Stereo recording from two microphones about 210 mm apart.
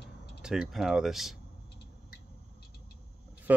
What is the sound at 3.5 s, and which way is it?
Speech, 10° right (ahead or behind).